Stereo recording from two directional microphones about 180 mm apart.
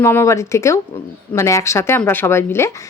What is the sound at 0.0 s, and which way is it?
A woman's voice, 15° left (ahead or behind).